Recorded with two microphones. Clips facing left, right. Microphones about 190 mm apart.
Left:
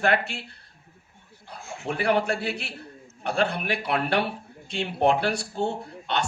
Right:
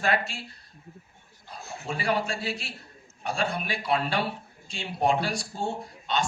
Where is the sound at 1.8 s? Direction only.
65° left (ahead or behind).